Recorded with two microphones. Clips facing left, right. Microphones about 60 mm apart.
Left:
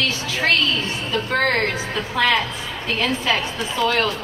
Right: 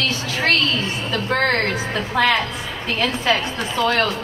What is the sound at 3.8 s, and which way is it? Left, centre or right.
Speech, right.